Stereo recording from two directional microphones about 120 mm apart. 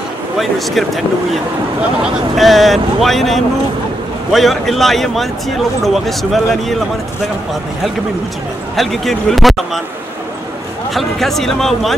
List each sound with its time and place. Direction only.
1.8 s speech: 5° right (ahead or behind)
8.7 s speech: centre (ahead or behind)
10.9 s speech: centre (ahead or behind)